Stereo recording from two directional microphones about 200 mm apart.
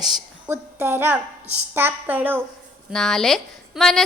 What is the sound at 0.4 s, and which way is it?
A woman's voice, 10° right (ahead or behind).